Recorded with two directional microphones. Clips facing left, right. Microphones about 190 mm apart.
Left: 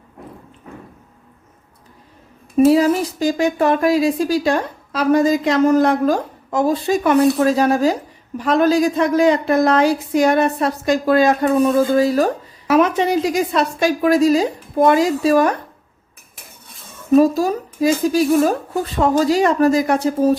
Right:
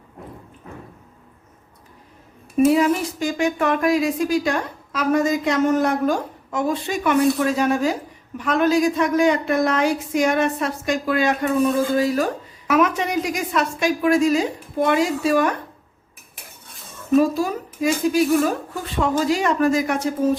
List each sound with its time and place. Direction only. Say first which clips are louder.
2.6 s a woman's voice: left 3 dB; 35° left (ahead or behind)
17.2 s a woman's voice: left 4 dB; 40° left (ahead or behind)